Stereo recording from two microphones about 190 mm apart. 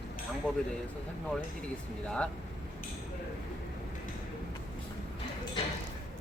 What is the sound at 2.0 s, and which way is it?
Speech, 5° left (ahead or behind).